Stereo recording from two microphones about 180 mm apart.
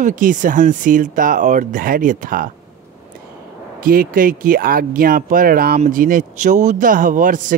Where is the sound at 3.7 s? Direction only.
55° right (ahead or behind).